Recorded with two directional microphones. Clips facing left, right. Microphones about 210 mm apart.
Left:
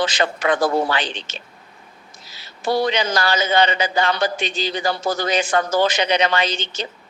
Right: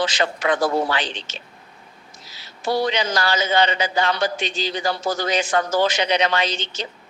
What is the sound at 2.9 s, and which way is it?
A man's voice, 55° left (ahead or behind).